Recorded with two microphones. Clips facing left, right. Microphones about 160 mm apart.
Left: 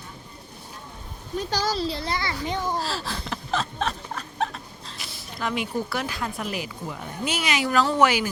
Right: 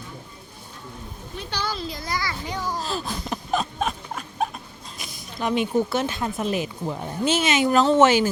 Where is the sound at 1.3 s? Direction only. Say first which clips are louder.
Left 5 dB; 40° left (ahead or behind); by 2.8 s 25° left (ahead or behind).